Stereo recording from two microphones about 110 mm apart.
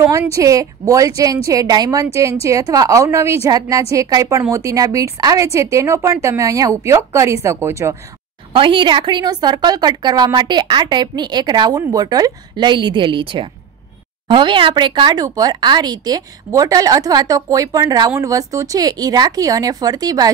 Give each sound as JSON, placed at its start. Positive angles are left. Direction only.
{"t": 0.3, "sound": "a woman's voice", "side_deg": -30}
{"t": 8.5, "sound": "a woman's voice", "side_deg": -50}